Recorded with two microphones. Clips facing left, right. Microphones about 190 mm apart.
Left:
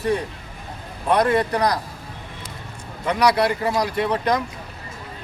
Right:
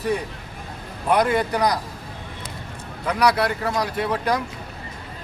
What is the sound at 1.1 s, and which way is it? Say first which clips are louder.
Speech: left 1 dB; 5° right (ahead or behind).